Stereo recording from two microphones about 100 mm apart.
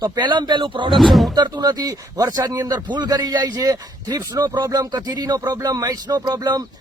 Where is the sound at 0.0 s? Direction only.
45° right (ahead or behind).